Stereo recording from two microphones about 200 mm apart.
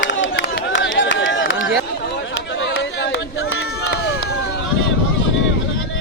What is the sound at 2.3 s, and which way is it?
Run, 70° left (ahead or behind).